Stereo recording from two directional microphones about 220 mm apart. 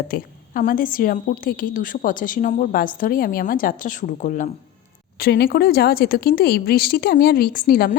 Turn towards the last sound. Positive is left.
turn(degrees=40)  # may be behind; listen again after turning